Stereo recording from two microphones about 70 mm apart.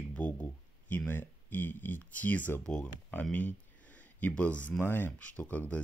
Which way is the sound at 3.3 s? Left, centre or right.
Left.